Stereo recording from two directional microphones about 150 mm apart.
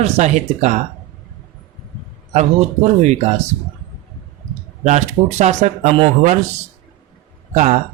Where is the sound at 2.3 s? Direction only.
50° right (ahead or behind).